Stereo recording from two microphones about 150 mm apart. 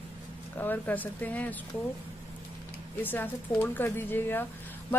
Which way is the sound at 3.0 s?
15° left (ahead or behind).